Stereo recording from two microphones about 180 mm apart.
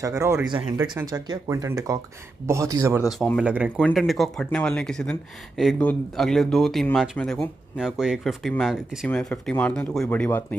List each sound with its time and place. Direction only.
0.0 s speech: 15° right (ahead or behind)
3.1 s speech: centre (ahead or behind)